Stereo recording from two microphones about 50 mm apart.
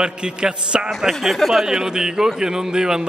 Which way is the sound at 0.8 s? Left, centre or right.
Centre.